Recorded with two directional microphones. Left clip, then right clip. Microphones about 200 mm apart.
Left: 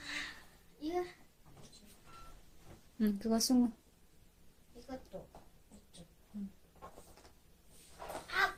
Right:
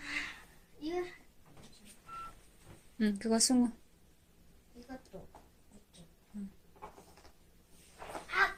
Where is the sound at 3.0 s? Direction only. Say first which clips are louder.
Right 3 dB; centre (ahead or behind).